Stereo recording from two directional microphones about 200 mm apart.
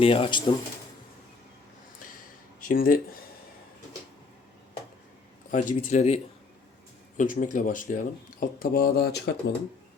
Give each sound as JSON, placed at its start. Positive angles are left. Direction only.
{"t": 0.0, "sound": "speech", "side_deg": 25}
{"t": 2.6, "sound": "speech", "side_deg": 45}
{"t": 5.5, "sound": "speech", "side_deg": 40}
{"t": 7.2, "sound": "speech", "side_deg": 40}